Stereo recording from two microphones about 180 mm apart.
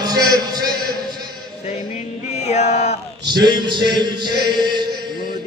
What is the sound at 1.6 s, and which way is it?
Music, 40° left (ahead or behind).